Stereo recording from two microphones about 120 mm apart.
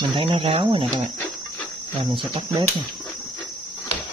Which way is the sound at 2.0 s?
40° right (ahead or behind).